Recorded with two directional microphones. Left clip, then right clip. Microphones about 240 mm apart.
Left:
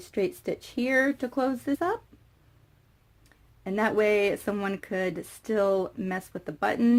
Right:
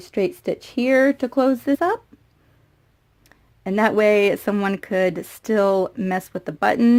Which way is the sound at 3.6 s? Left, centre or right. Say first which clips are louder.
Right 7 dB; right.